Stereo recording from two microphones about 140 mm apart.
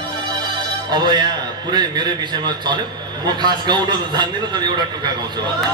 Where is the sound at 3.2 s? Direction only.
30° right (ahead or behind).